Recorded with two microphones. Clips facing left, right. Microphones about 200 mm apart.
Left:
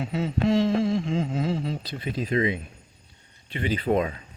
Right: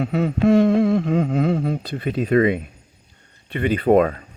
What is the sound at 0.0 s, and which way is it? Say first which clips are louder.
Speech: right 6 dB; 60° right (ahead or behind).